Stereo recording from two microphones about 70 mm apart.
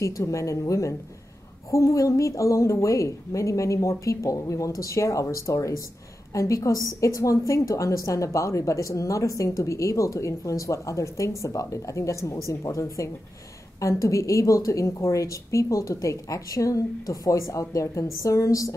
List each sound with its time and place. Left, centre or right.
0.0 s a woman's voice: left